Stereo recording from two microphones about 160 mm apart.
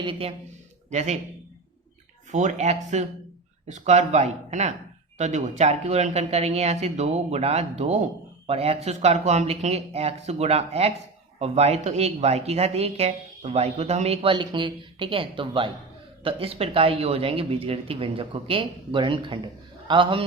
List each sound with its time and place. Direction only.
0.0 s speech: 35° right (ahead or behind)
0.9 s speech: 45° right (ahead or behind)
2.3 s speech: 45° right (ahead or behind); by 20.2 s 30° right (ahead or behind)